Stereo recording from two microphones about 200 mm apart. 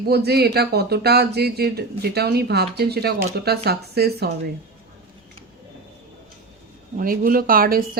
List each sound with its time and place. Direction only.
0.1 s speech: 55° right (ahead or behind)
6.9 s speech: 45° right (ahead or behind)